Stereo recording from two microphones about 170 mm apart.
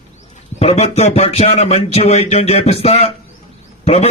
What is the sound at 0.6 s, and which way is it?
A man's voice, 35° left (ahead or behind).